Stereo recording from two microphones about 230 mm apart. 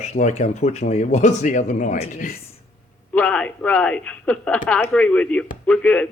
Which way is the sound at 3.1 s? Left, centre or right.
Centre.